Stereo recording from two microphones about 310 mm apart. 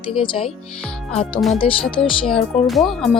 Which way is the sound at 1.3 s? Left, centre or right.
Centre.